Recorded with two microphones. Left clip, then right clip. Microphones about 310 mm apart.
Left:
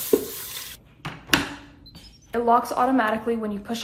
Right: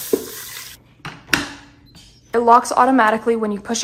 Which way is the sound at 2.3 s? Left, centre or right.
Right.